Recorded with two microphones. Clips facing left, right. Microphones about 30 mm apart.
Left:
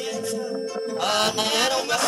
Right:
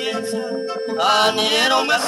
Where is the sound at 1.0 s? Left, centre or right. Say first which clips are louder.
Right 7 dB; right.